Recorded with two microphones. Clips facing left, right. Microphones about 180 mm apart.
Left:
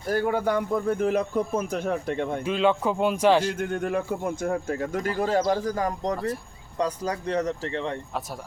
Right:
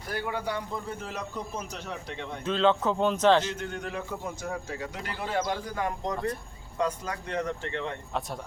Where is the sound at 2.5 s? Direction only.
10° left (ahead or behind).